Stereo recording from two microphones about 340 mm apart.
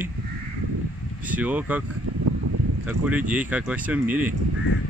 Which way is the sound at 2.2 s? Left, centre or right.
Right.